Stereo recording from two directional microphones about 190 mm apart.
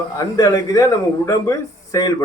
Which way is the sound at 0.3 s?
20° left (ahead or behind).